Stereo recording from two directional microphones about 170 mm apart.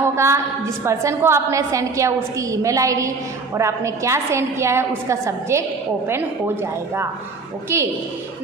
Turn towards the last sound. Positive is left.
turn(degrees=-15)  # may be behind; listen again after turning